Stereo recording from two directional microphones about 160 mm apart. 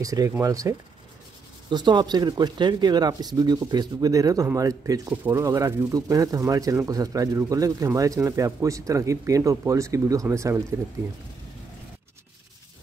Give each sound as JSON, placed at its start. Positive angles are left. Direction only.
{"t": 0.0, "sound": "speech", "side_deg": -20}